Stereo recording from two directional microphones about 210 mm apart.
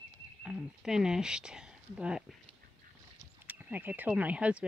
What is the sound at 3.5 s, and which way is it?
Speech, 10° right (ahead or behind).